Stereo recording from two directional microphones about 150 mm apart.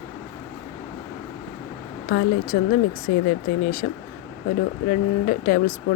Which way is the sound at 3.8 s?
85° left.